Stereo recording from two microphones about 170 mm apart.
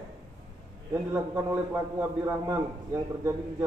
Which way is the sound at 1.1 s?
10° right (ahead or behind).